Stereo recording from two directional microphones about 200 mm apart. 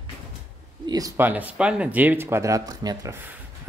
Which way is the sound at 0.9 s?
15° right (ahead or behind).